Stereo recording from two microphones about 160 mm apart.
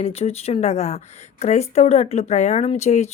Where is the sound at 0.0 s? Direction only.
40° left (ahead or behind).